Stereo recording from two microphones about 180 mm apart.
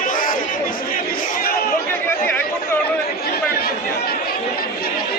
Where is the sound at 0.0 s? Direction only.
50° left (ahead or behind).